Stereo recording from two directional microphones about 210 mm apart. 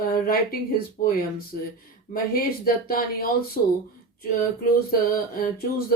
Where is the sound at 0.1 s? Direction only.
45° left (ahead or behind).